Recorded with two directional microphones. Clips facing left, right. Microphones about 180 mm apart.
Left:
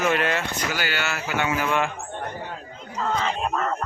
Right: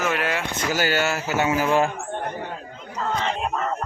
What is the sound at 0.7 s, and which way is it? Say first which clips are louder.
Speech: right 9 dB; 40° right (ahead or behind).